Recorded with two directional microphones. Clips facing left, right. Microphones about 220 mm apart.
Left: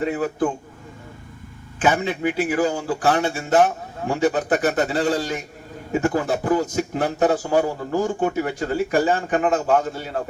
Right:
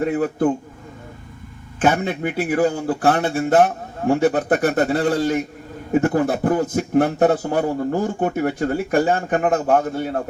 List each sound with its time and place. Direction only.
0.0 s a man's voice: 55° right (ahead or behind)
1.8 s a man's voice: 55° right (ahead or behind)